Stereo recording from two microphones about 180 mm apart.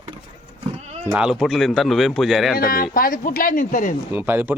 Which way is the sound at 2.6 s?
55° left (ahead or behind).